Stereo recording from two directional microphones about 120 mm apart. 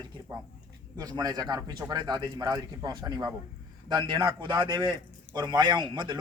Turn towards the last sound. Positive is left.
turn(degrees=-40)  # may be behind; listen again after turning